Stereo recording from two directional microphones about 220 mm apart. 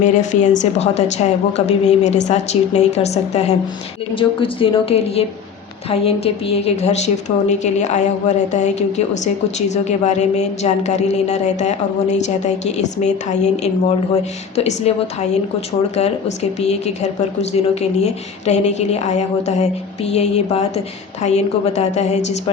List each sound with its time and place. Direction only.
0.0 s a woman's voice: 35° left (ahead or behind)
16.0 s speech: 30° left (ahead or behind)